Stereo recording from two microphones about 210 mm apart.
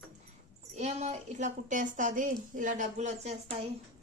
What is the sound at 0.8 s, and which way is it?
A woman's voice, 30° right (ahead or behind).